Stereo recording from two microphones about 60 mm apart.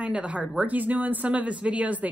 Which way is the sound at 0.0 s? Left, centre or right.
Right.